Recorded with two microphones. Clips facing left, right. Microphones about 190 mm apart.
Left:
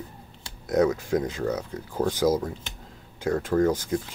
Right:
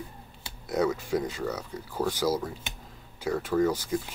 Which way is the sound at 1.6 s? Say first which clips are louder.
Left 4 dB; 15° left (ahead or behind).